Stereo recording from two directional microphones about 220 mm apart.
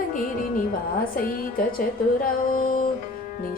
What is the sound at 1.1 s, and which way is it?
Music, 40° left (ahead or behind).